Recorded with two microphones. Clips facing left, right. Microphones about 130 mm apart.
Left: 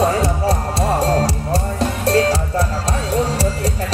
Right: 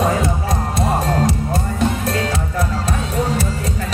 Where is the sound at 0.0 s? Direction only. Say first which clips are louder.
Left 2 dB; 35° left (ahead or behind).